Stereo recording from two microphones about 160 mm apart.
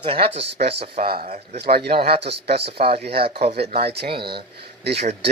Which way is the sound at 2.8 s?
60° right (ahead or behind).